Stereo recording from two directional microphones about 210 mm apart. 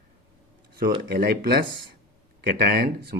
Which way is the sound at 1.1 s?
45° right (ahead or behind).